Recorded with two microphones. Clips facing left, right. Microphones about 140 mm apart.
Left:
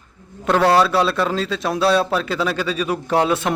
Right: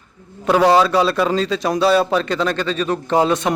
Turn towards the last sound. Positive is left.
turn(degrees=0)  # may be behind; listen again after turning